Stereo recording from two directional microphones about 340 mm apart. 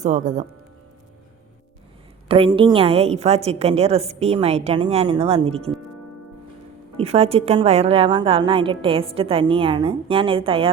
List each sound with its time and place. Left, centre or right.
0.0 s speech: right
2.2 s a woman's voice: centre
6.9 s a woman's voice: centre